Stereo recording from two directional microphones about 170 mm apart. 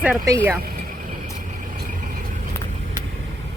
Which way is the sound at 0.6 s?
60° right (ahead or behind).